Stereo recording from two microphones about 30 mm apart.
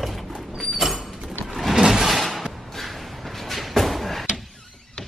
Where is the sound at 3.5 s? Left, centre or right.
Centre.